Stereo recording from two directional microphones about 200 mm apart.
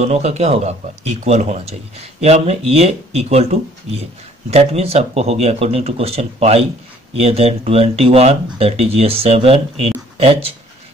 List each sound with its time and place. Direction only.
0.0 s speech: 35° right (ahead or behind)